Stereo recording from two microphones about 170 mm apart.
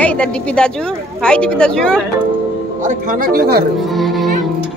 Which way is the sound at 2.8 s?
50° right (ahead or behind).